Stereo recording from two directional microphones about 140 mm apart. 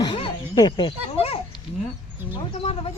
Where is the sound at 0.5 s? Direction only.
30° left (ahead or behind).